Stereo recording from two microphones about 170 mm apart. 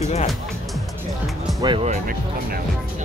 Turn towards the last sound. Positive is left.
turn(degrees=-25)  # may be behind; listen again after turning